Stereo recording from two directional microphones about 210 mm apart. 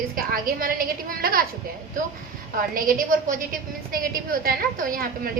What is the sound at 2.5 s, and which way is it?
A woman's voice, 45° right (ahead or behind).